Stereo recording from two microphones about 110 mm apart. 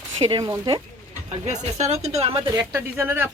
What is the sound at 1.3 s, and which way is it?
Speech, 90° right.